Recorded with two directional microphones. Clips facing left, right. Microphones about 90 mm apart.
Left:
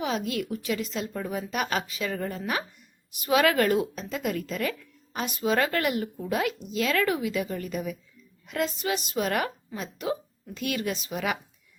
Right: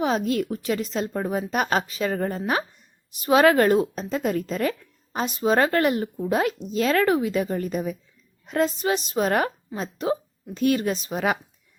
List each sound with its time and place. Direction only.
0.0 s speech: 40° right (ahead or behind)